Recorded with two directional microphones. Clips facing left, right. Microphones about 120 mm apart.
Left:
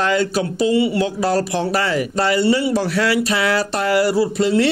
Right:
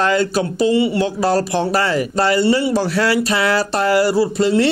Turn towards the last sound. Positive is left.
turn(degrees=-35)  # may be behind; listen again after turning